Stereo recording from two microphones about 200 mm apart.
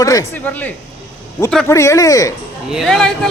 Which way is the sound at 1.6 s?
15° left (ahead or behind).